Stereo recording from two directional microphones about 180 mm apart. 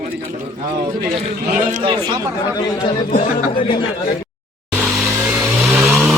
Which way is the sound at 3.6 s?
25° left (ahead or behind).